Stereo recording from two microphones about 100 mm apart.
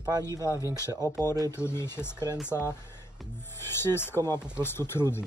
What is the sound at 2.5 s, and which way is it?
Speech, 25° left (ahead or behind).